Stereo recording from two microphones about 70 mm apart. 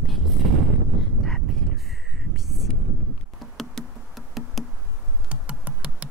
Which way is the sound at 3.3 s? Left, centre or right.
Centre.